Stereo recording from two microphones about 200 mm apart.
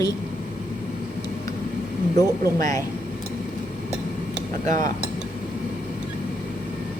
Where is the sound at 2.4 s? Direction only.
15° left (ahead or behind).